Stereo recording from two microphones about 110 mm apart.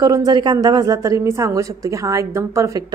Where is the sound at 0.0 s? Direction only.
35° right (ahead or behind).